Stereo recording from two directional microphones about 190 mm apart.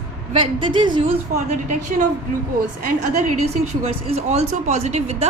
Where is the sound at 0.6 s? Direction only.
25° right (ahead or behind).